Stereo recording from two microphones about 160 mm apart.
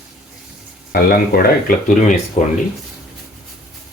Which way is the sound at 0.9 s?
70° left (ahead or behind).